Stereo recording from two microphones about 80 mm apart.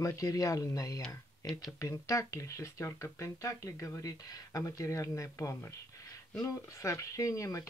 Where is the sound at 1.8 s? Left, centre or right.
Left.